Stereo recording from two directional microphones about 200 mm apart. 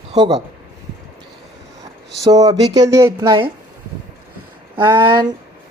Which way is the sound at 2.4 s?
20° right (ahead or behind).